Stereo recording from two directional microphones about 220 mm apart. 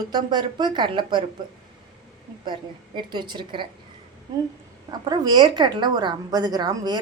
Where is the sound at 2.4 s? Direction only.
20° right (ahead or behind).